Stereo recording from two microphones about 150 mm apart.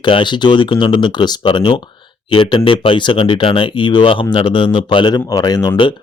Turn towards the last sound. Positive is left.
turn(degrees=30)  # may be behind; listen again after turning